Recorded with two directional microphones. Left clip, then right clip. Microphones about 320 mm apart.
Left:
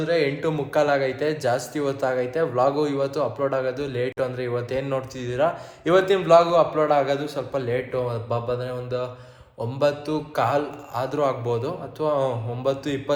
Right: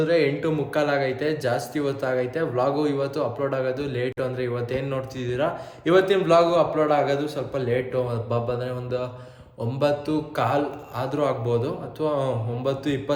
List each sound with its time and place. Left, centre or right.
0.0 s a man's voice: centre